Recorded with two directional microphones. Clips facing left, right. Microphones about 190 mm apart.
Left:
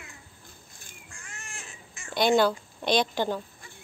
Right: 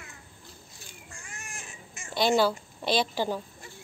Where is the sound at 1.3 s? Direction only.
15° right (ahead or behind).